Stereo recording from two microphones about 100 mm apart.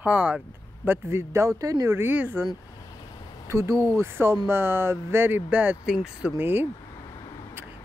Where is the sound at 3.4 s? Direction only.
25° right (ahead or behind).